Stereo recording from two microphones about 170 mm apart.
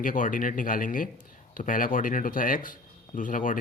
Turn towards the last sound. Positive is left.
turn(degrees=50)  # may be behind; listen again after turning